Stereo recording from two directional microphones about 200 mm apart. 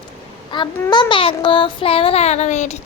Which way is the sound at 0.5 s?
25° left (ahead or behind).